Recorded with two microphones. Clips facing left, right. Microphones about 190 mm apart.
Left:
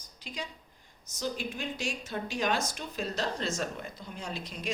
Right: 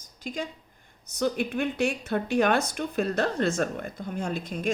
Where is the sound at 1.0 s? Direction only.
60° right (ahead or behind).